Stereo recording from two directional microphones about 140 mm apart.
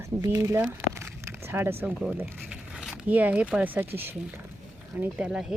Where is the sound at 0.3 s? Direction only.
20° right (ahead or behind).